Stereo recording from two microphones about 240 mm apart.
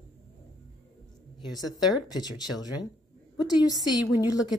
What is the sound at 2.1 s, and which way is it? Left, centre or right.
Speech, centre.